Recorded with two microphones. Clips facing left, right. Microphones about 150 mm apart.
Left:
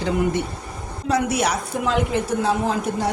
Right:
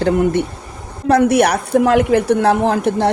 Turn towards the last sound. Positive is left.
turn(degrees=-65)  # may be behind; listen again after turning